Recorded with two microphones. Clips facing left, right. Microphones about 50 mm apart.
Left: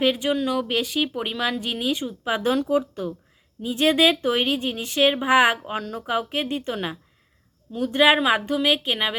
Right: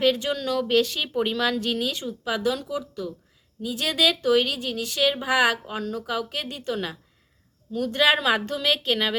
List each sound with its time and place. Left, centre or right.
0.0 s speech: centre